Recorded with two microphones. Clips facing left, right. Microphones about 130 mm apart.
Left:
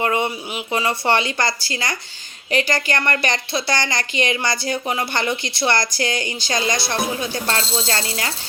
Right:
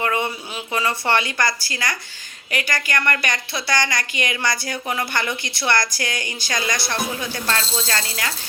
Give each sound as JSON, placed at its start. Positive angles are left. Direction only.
{"t": 0.0, "sound": "speech", "side_deg": 25}